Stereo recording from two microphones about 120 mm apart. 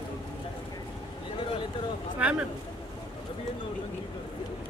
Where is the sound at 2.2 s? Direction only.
10° right (ahead or behind).